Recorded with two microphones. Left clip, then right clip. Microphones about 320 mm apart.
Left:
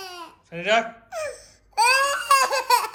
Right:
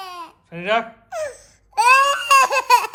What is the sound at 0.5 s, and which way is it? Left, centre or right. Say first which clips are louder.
Speech: right 1 dB; centre.